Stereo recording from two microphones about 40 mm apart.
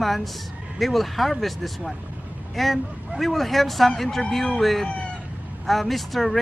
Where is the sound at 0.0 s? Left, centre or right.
Centre.